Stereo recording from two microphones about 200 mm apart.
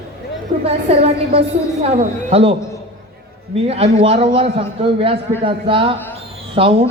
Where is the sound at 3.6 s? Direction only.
30° right (ahead or behind).